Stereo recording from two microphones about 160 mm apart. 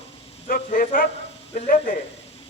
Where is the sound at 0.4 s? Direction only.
60° left (ahead or behind).